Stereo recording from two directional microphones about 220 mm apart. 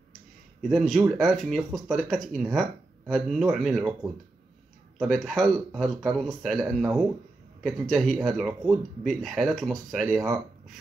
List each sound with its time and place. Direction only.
0.6 s speech: centre (ahead or behind)
4.9 s speech: centre (ahead or behind)